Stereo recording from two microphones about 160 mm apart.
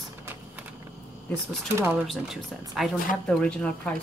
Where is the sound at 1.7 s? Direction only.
15° right (ahead or behind).